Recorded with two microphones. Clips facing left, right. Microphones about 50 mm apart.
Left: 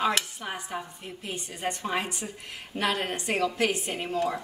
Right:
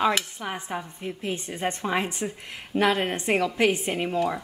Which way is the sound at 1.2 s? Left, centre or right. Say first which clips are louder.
Right 3 dB; right.